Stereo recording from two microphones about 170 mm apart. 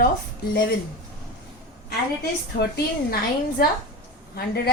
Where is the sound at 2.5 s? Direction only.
70° left (ahead or behind).